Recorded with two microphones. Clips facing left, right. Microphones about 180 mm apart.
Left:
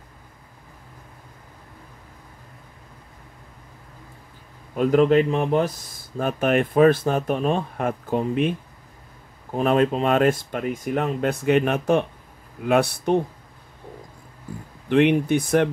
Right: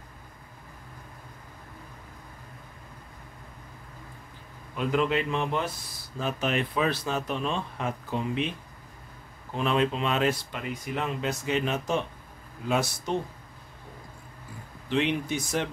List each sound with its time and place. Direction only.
4.7 s speech: 45° left (ahead or behind)
9.5 s speech: 45° left (ahead or behind)
14.9 s speech: 60° left (ahead or behind)